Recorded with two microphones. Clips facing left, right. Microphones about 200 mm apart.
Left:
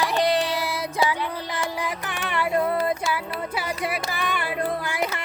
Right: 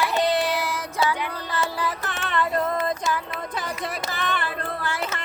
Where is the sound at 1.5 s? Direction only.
10° left (ahead or behind).